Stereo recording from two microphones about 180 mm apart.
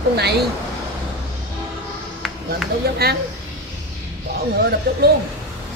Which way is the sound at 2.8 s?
60° right (ahead or behind).